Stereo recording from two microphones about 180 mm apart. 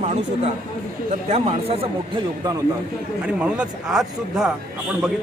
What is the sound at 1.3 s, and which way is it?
Speech, 35° right (ahead or behind).